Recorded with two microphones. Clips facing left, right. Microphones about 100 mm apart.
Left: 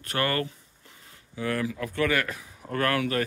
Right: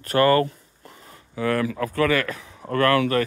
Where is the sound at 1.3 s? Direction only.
65° right (ahead or behind).